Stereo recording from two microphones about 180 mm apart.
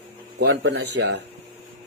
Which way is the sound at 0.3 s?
85° right.